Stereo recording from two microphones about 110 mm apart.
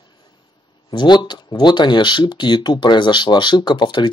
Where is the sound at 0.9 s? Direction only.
45° left (ahead or behind).